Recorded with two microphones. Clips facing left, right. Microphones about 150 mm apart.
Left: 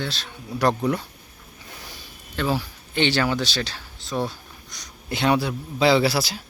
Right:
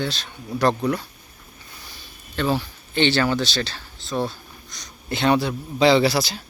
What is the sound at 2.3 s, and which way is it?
Speech, 5° left (ahead or behind).